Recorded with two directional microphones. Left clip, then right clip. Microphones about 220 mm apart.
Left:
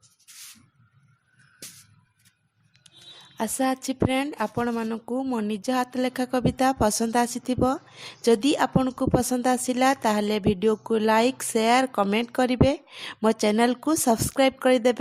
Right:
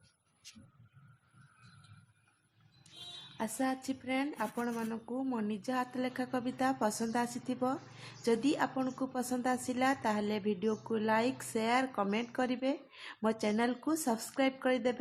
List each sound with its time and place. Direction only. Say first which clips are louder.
3.3 s a woman's voice: left 10 dB; 40° left (ahead or behind)